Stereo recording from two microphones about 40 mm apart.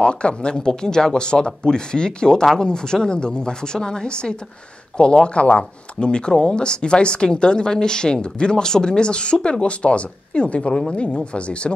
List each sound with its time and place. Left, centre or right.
0.0 s a woman's voice: left